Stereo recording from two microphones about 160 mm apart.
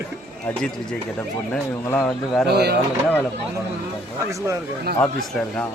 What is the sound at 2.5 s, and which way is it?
Speech, 90° right.